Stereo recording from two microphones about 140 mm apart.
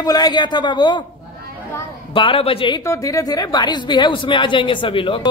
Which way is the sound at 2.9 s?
25° left (ahead or behind).